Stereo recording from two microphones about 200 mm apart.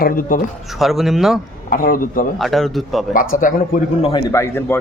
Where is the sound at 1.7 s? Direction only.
45° left (ahead or behind).